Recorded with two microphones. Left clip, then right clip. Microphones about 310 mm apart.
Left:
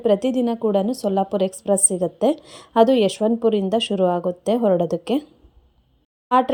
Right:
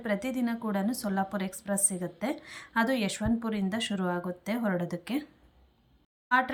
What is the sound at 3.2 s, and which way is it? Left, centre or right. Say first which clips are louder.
Speech: left 12 dB; left.